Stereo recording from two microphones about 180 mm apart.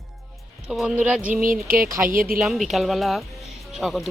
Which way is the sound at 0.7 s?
5° right (ahead or behind).